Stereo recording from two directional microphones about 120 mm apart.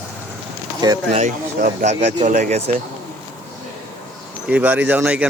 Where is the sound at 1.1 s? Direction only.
85° right; by 2.8 s 60° right (ahead or behind).